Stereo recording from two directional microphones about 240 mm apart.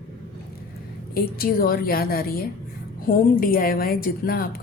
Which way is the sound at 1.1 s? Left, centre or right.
Left.